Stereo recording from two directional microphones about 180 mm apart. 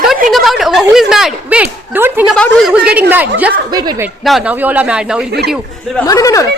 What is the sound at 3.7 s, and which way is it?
Speech, 20° right (ahead or behind).